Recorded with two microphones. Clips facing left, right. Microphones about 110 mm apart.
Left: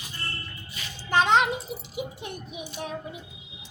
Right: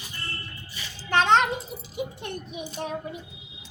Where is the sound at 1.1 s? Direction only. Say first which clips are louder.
Right 1 dB; 10° left (ahead or behind).